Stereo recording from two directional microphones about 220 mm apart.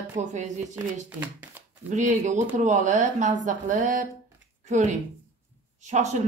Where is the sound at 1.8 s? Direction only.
35° right (ahead or behind).